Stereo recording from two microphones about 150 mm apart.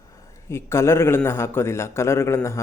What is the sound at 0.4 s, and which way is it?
Speech, 20° left (ahead or behind).